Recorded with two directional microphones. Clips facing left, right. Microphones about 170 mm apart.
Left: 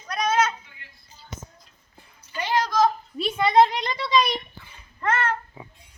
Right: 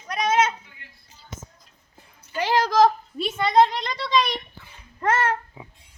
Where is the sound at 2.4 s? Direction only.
90° right.